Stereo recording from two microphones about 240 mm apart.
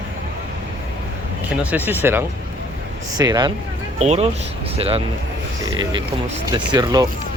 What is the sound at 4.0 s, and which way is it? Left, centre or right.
Speech, right.